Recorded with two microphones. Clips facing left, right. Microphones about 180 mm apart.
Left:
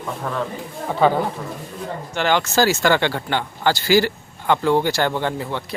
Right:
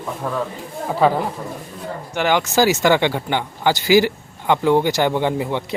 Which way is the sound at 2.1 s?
15° right (ahead or behind).